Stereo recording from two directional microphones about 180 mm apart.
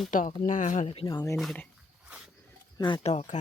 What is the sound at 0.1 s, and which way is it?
Speech, 45° left (ahead or behind).